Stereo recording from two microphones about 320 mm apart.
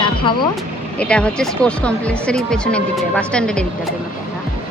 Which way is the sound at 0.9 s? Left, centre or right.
Centre.